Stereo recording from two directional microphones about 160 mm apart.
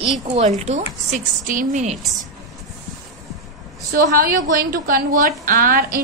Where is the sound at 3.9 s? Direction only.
65° right (ahead or behind).